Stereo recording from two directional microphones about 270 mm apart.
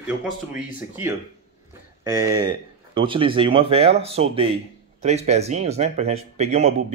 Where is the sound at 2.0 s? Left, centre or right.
Centre.